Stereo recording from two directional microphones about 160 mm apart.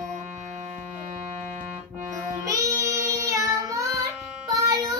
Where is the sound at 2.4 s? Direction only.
20° right (ahead or behind).